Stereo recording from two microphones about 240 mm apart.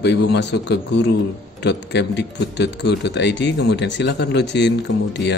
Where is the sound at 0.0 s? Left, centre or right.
Left.